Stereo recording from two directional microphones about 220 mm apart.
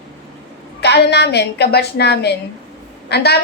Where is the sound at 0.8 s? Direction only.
50° left (ahead or behind).